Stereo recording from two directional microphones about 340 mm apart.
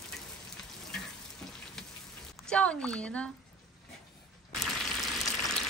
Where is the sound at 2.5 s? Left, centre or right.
Centre.